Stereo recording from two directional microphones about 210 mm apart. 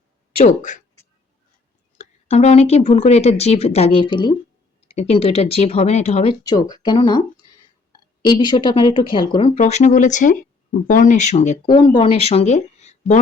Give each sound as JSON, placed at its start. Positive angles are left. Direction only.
{"t": 0.4, "sound": "speech", "side_deg": 35}
{"t": 2.0, "sound": "speech", "side_deg": 30}
{"t": 6.5, "sound": "speech", "side_deg": 20}
{"t": 8.2, "sound": "speech", "side_deg": 20}
{"t": 9.6, "sound": "speech", "side_deg": 35}